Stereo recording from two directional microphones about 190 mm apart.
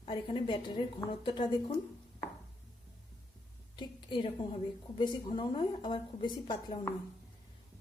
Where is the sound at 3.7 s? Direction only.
25° left (ahead or behind).